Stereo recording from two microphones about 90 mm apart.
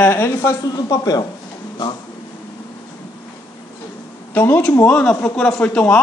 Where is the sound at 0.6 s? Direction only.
45° left (ahead or behind).